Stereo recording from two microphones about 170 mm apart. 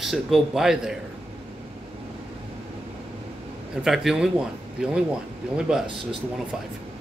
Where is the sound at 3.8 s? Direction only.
Centre (ahead or behind).